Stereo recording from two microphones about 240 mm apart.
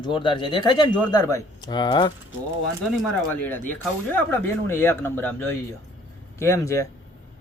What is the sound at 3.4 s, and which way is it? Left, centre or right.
Speech, centre.